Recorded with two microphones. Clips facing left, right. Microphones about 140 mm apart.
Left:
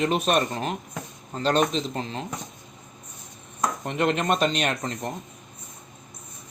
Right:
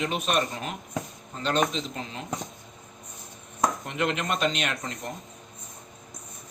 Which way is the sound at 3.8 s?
45° left (ahead or behind).